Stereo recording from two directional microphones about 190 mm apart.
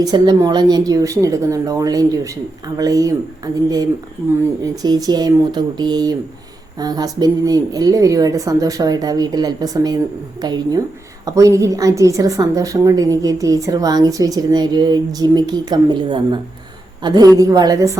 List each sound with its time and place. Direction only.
0.0 s a woman's voice: 20° right (ahead or behind)